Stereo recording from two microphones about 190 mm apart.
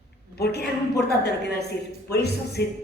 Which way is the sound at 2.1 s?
60° left (ahead or behind).